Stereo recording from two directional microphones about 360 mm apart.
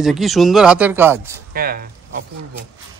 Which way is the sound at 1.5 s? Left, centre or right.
Right.